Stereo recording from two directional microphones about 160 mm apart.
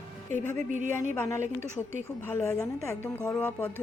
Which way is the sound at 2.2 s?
15° left (ahead or behind).